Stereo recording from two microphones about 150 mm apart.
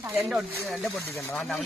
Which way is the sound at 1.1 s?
20° left (ahead or behind).